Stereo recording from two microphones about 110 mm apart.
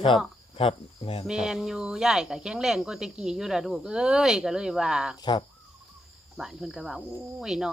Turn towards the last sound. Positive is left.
turn(degrees=-5)  # may be behind; listen again after turning